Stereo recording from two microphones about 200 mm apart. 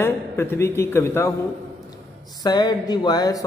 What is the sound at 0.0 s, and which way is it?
Speech, 10° left (ahead or behind).